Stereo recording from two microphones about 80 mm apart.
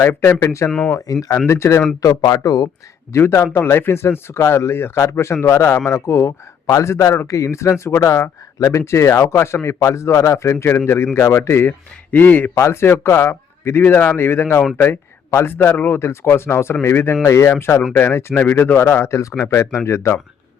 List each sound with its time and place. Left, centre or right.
0.0 s a man's voice: left
0.9 s speech: left
1.5 s a man's voice: left
2.0 s speech: left
3.1 s a man's voice: left
12.1 s speech: left
12.5 s a man's voice: left